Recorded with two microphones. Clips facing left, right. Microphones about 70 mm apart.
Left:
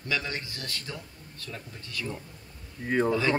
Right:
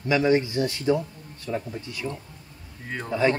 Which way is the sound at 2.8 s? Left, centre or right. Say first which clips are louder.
Left 9 dB; centre.